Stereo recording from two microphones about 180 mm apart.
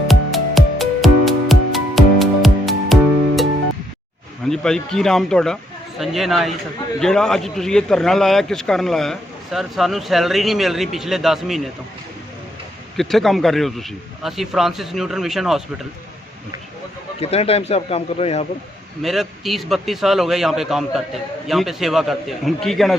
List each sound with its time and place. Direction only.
0.1 s music: centre (ahead or behind)
4.4 s speech: 5° left (ahead or behind)
13.0 s speech: centre (ahead or behind)
17.2 s speech: 35° left (ahead or behind)
19.0 s speech: centre (ahead or behind)